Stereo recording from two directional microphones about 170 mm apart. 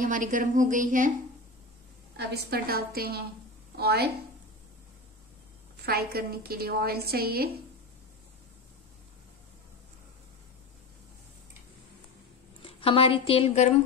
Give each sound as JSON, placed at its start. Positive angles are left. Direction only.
{"t": 0.0, "sound": "a woman's voice", "side_deg": -50}
{"t": 2.1, "sound": "a woman's voice", "side_deg": -70}
{"t": 5.9, "sound": "a woman's voice", "side_deg": -65}
{"t": 12.6, "sound": "a woman's voice", "side_deg": 35}